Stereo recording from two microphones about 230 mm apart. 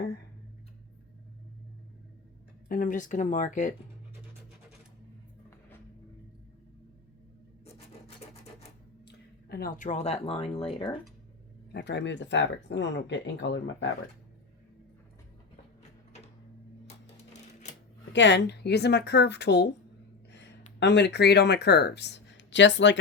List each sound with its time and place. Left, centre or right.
2.6 s speech: left
9.5 s speech: left
11.7 s speech: left
18.1 s speech: left
20.7 s speech: left